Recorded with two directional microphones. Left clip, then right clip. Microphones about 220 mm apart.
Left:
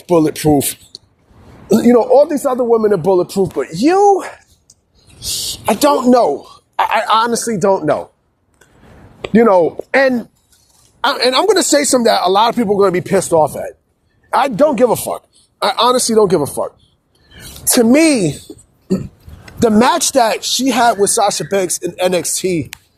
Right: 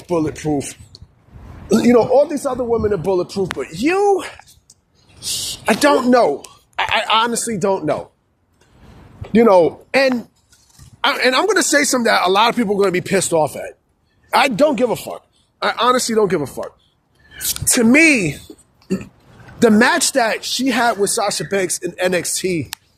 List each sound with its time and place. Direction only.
0.0 s speech: 35° left (ahead or behind)
0.9 s vehicle: 30° left (ahead or behind)
1.7 s speech: 25° left (ahead or behind); by 4.8 s 10° left (ahead or behind)
5.2 s speech: 20° left (ahead or behind)
6.7 s speech: 5° left (ahead or behind)
9.3 s speech: 20° left (ahead or behind); by 14.8 s centre (ahead or behind)
14.8 s speech: 30° left (ahead or behind); by 16.6 s 10° left (ahead or behind)
17.7 s a woman's voice: 15° left (ahead or behind)